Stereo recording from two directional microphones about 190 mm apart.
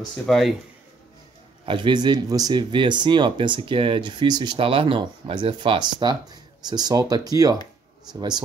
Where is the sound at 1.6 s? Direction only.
25° right (ahead or behind).